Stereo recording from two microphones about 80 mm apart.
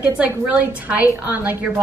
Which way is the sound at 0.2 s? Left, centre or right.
Centre.